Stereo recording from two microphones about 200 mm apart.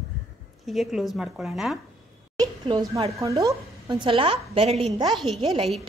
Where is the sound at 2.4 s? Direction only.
20° right (ahead or behind).